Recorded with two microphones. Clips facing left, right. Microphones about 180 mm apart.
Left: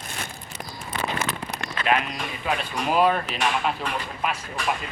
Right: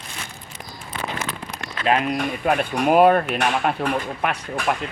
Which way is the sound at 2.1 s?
55° right (ahead or behind).